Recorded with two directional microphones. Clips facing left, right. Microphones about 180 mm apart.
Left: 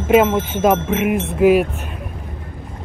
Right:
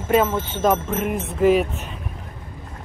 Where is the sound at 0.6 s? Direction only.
10° left (ahead or behind).